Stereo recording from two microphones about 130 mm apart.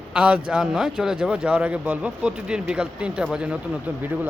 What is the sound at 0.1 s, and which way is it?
Speech, 10° right (ahead or behind).